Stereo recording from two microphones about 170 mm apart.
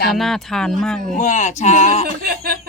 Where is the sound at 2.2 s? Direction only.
65° right (ahead or behind).